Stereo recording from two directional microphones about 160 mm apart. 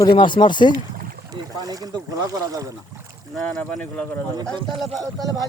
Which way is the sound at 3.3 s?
10° left (ahead or behind).